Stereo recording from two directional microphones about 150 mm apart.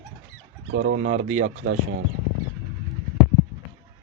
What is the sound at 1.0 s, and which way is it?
Speech, 55° right (ahead or behind).